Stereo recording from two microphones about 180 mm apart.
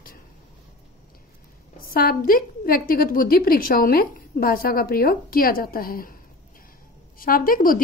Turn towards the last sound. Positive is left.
turn(degrees=50)  # may be behind; listen again after turning